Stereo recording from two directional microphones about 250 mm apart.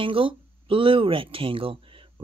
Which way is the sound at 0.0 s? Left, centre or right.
Right.